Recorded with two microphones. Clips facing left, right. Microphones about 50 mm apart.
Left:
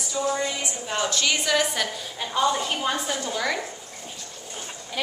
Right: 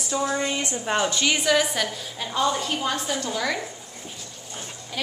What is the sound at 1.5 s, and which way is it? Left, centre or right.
A woman's voice, centre.